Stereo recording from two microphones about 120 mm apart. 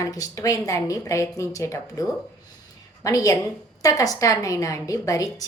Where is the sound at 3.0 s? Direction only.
25° left (ahead or behind).